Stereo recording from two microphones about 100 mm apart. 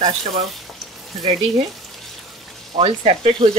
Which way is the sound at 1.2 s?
90° right.